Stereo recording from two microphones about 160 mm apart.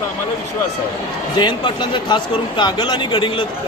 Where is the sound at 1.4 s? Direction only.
30° left (ahead or behind).